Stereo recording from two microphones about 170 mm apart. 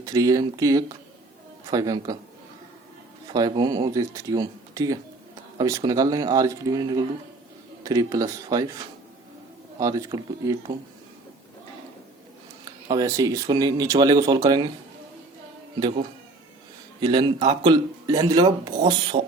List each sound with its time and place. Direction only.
0.0 s speech: 20° right (ahead or behind)
3.3 s speech: 25° right (ahead or behind)
9.7 s speech: 20° right (ahead or behind)
12.9 s speech: 20° right (ahead or behind)
17.0 s speech: 25° right (ahead or behind)